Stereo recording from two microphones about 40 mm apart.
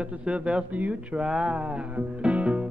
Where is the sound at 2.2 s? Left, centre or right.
Right.